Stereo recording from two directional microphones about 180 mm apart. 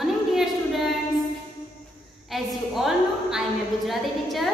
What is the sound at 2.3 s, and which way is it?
A woman's voice, centre (ahead or behind).